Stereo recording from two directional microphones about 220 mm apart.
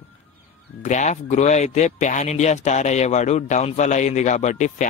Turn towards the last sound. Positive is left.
turn(degrees=35)  # may be behind; listen again after turning